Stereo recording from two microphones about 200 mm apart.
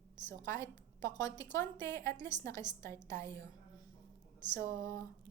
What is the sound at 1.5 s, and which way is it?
A woman's voice, 15° left (ahead or behind).